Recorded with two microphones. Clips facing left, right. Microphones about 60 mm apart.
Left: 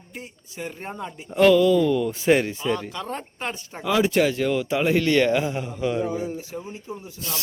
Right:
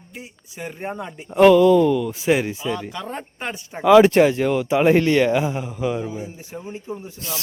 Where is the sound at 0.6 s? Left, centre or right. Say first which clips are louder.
Right 3 dB; centre.